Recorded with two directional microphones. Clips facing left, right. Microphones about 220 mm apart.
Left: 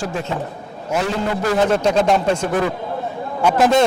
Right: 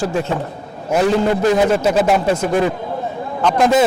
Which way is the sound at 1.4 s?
15° right (ahead or behind).